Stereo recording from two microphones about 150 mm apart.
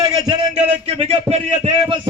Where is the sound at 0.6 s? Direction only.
45° right (ahead or behind).